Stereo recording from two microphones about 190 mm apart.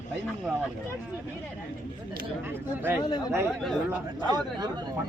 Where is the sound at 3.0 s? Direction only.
20° left (ahead or behind).